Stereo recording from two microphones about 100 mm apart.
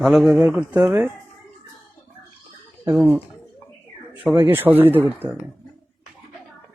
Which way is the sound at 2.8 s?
20° right (ahead or behind).